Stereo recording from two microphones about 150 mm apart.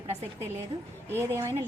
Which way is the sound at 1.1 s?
20° right (ahead or behind).